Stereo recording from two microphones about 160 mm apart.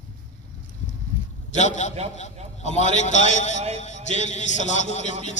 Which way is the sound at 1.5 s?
50° left (ahead or behind).